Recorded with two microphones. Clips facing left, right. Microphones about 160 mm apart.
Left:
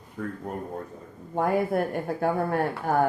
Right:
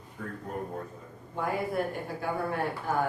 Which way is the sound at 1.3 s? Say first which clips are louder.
Left 6 dB; 50° left (ahead or behind).